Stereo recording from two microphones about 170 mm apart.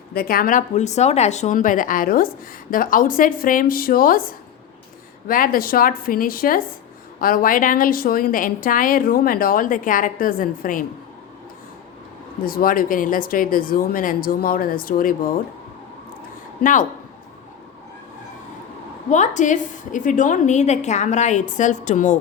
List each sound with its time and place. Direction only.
0.1 s a woman's voice: 60° left (ahead or behind)
12.5 s a woman's voice: 55° left (ahead or behind)
16.6 s speech: 50° left (ahead or behind)
19.1 s speech: 45° left (ahead or behind)